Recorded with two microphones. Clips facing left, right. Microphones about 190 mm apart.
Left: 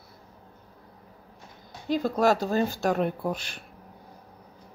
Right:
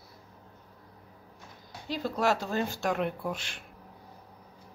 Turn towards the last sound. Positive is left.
turn(degrees=40)  # may be behind; listen again after turning